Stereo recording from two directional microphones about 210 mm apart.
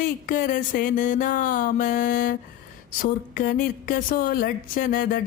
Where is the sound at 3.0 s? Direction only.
40° left (ahead or behind).